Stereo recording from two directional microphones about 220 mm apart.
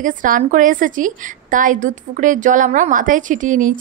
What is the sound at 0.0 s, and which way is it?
A woman's voice, 35° right (ahead or behind).